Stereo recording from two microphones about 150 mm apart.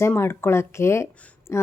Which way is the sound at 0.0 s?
15° left (ahead or behind).